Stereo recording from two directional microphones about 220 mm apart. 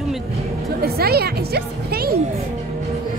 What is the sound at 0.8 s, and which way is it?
Speech, 45° right (ahead or behind).